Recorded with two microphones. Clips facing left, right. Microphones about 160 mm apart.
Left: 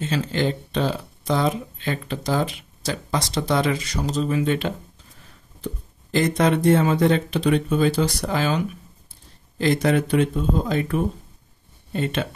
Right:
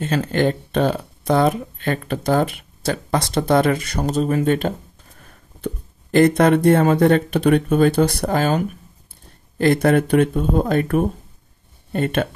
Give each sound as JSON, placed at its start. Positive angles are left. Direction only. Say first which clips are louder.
{"t": 0.0, "sound": "speech", "louder": "right 4 dB", "side_deg": -55}
{"t": 5.2, "sound": "a sound", "louder": "right 5 dB", "side_deg": -55}
{"t": 6.1, "sound": "speech", "louder": "right 6 dB", "side_deg": -55}